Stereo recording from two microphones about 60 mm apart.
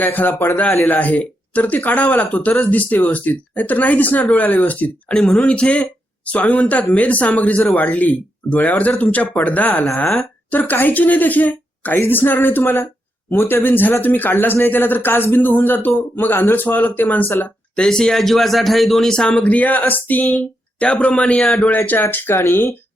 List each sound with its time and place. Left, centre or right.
0.0 s a man's voice: left
5.1 s a man's voice: centre; by 17.5 s left
17.7 s speech: centre
19.5 s speech: left
20.8 s a man's voice: centre
21.7 s a man's voice: left